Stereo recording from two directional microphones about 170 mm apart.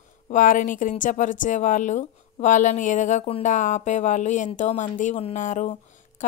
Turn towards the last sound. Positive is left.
turn(degrees=50)  # may be behind; listen again after turning